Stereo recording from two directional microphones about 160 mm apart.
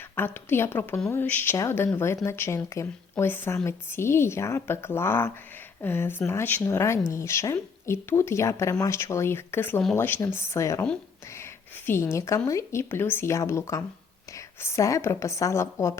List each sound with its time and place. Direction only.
0.2 s speech: 15° left (ahead or behind)
12.1 s a woman's voice: 20° left (ahead or behind)